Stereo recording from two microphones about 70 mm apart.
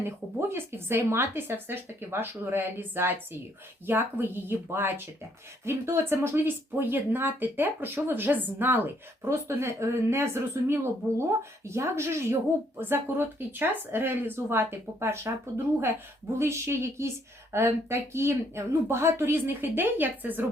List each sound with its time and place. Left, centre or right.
0.0 s speech: right
9.3 s speech: right